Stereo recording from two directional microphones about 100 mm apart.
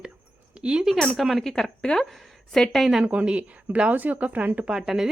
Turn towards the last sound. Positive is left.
turn(degrees=-5)  # may be behind; listen again after turning